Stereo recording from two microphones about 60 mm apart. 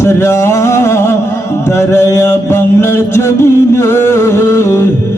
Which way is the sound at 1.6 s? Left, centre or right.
Left.